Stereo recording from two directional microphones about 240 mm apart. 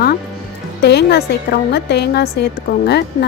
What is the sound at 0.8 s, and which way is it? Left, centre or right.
A woman's voice, left.